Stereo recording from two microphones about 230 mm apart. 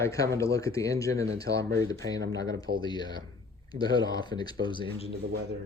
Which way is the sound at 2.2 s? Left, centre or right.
Right.